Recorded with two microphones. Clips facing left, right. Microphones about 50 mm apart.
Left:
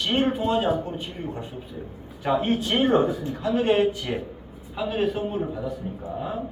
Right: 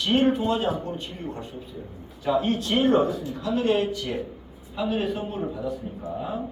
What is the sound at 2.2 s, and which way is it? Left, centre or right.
Speech, left.